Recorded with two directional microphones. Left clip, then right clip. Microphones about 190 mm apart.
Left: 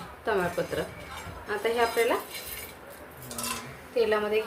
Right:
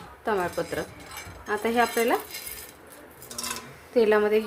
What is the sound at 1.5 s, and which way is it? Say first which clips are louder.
Speech: right 2 dB; 35° right (ahead or behind).